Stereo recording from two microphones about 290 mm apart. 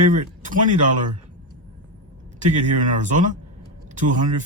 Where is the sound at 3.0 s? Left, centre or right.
Right.